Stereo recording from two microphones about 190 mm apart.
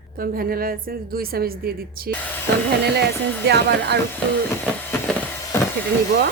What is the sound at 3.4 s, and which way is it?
Speech, 60° right (ahead or behind).